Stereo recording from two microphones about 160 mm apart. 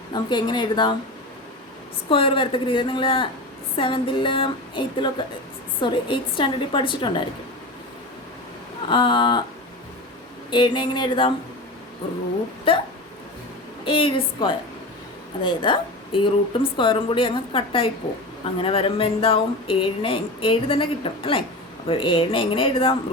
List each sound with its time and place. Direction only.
0.1 s a woman's voice: 30° left (ahead or behind)
2.0 s a woman's voice: 35° left (ahead or behind)
8.9 s a woman's voice: 30° left (ahead or behind)
10.5 s a woman's voice: 30° left (ahead or behind)
12.7 s speech: 35° left (ahead or behind)
13.8 s speech: 35° left (ahead or behind)